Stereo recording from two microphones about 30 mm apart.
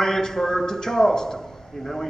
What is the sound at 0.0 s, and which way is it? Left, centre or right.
A man's voice, centre.